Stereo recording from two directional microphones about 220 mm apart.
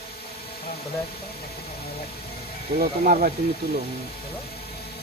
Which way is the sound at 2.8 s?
40° right (ahead or behind).